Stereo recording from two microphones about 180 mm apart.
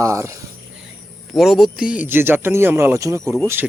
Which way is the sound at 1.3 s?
Centre (ahead or behind).